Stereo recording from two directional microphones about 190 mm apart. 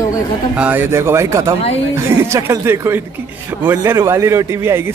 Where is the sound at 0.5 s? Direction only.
10° right (ahead or behind).